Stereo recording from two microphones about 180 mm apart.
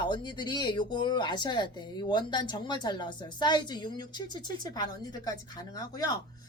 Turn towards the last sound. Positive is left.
turn(degrees=20)  # may be behind; listen again after turning